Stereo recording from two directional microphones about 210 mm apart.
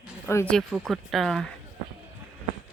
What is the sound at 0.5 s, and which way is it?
Speech, centre (ahead or behind).